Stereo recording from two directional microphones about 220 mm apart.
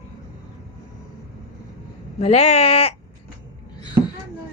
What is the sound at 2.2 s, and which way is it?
Speech, 30° left (ahead or behind).